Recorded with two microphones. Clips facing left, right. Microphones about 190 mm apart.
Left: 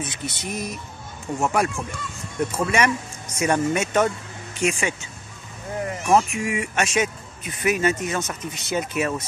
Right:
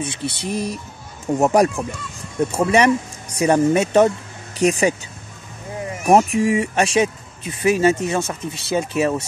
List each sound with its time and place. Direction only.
0.0 s speech: 30° right (ahead or behind)
6.0 s speech: 35° right (ahead or behind)